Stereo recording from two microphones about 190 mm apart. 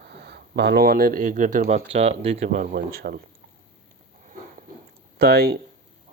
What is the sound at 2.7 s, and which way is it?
Speech, 55° right (ahead or behind).